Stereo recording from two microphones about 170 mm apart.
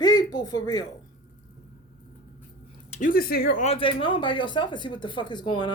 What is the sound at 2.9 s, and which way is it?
Speech, 50° left (ahead or behind).